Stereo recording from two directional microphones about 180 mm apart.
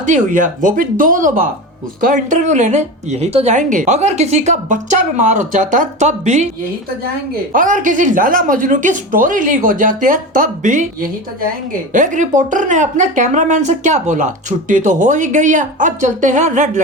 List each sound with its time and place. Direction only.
0.0 s a woman's voice: 45° right (ahead or behind)
7.5 s a woman's voice: 45° right (ahead or behind)